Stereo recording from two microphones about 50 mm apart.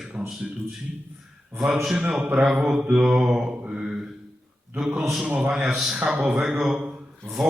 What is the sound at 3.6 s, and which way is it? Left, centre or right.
Mantra, centre.